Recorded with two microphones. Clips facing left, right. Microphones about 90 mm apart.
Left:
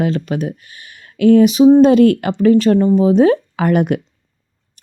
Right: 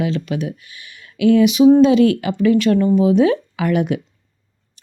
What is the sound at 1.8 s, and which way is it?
Speech, 50° left (ahead or behind).